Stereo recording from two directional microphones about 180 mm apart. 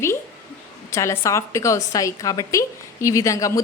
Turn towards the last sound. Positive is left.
turn(degrees=15)  # may be behind; listen again after turning